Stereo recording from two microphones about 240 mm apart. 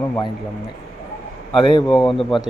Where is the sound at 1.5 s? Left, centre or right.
Centre.